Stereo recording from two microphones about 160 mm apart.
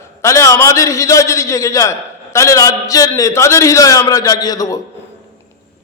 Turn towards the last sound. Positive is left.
turn(degrees=25)  # may be behind; listen again after turning